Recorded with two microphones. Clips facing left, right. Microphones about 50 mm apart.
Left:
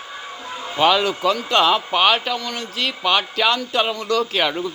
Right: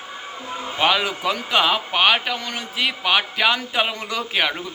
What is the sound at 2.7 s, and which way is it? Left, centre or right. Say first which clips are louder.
Speech: even; centre.